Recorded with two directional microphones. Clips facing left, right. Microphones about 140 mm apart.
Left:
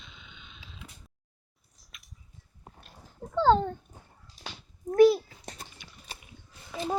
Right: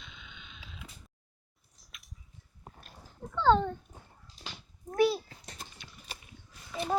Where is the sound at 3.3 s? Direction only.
40° left (ahead or behind).